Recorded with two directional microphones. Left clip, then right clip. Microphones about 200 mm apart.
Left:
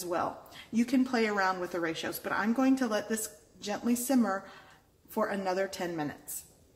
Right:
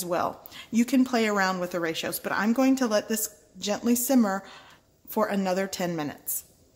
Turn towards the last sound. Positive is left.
turn(degrees=-40)  # may be behind; listen again after turning